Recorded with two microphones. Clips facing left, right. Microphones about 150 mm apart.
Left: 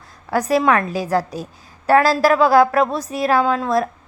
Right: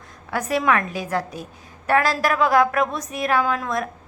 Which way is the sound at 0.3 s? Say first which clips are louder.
Left 5 dB; 35° left (ahead or behind).